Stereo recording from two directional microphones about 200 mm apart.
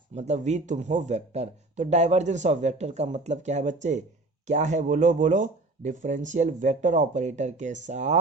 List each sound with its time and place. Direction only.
0.1 s speech: 35° right (ahead or behind)